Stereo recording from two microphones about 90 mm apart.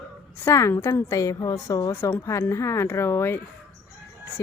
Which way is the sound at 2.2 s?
30° left (ahead or behind).